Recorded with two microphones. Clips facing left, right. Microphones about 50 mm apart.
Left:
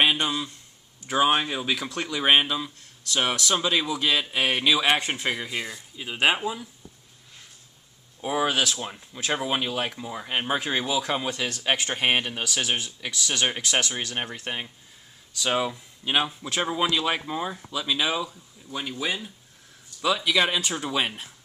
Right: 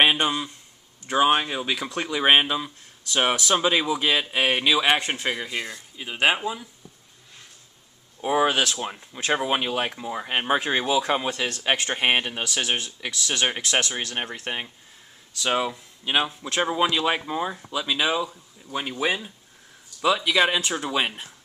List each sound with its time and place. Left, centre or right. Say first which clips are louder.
0.0 s a sound: right 3 dB; right
1.0 s speech: right 2 dB; centre
8.2 s speech: right 3 dB; centre
11.2 s speech: right 2 dB; centre; by 19.3 s right
20.0 s speech: right 2 dB; centre